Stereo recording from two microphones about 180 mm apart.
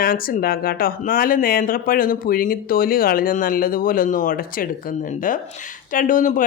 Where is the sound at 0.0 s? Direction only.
55° left (ahead or behind).